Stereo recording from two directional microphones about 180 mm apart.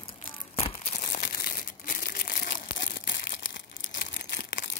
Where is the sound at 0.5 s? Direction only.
35° left (ahead or behind); by 2.9 s 55° left (ahead or behind).